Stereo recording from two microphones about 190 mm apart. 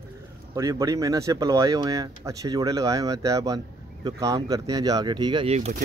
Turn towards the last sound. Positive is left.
turn(degrees=-25)  # may be behind; listen again after turning